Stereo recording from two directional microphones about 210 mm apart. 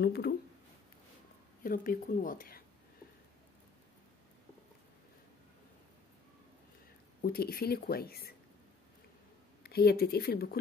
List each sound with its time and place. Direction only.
0.0 s speech: 50° left (ahead or behind)
1.6 s speech: 40° left (ahead or behind)
7.2 s speech: 45° left (ahead or behind)
9.6 s speech: 50° left (ahead or behind)